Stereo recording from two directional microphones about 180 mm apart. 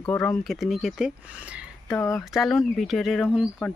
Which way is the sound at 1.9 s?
15° left (ahead or behind).